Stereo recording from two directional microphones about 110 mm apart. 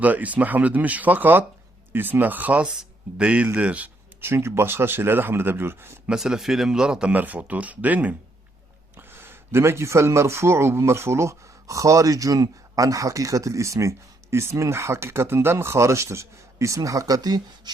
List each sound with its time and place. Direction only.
0.0 s a man's voice: 15° right (ahead or behind)
6.1 s a man's voice: 5° right (ahead or behind); by 17.4 s 35° right (ahead or behind)